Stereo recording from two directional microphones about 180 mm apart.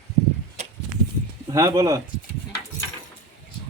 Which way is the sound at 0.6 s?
40° right (ahead or behind).